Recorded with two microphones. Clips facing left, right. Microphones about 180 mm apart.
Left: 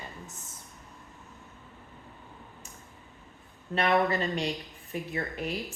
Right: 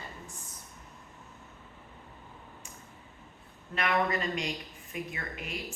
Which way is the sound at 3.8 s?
35° left (ahead or behind).